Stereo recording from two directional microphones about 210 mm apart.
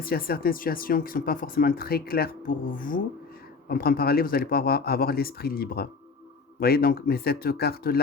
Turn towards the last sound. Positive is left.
turn(degrees=45)  # may be behind; listen again after turning